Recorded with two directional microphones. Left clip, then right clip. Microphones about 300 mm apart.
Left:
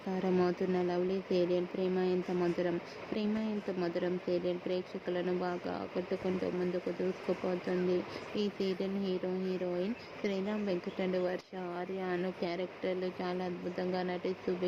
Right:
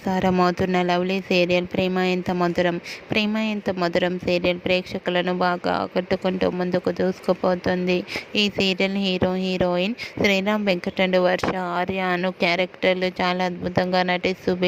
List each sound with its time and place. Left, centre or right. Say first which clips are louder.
0.1 s speech: right 12 dB; right